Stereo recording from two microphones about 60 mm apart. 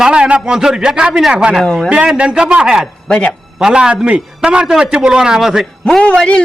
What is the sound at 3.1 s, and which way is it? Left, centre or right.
Speech, centre.